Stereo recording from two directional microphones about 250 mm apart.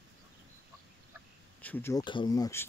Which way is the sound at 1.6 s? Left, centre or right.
Centre.